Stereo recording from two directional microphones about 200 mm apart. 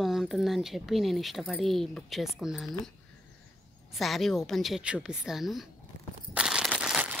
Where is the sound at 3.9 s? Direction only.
Centre (ahead or behind).